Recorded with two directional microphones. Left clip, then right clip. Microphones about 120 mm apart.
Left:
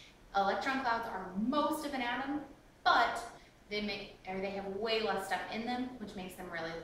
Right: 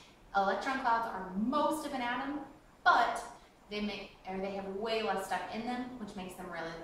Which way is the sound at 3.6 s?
10° right (ahead or behind).